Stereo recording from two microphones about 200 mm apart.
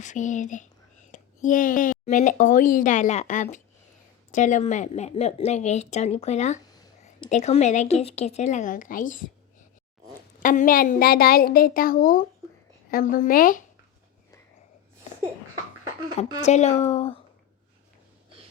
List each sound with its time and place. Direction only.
0.0 s a woman's voice: 40° left (ahead or behind)
10.4 s a woman's voice: 40° left (ahead or behind)
16.4 s a woman's voice: 35° left (ahead or behind)